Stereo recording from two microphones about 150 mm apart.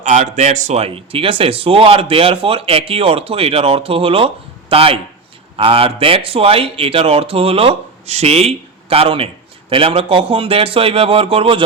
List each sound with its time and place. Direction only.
0.0 s speech: 50° right (ahead or behind)